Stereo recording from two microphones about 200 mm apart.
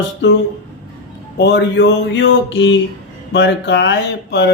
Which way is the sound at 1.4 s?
60° left (ahead or behind).